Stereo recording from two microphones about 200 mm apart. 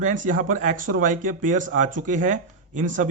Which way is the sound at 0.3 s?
40° right (ahead or behind).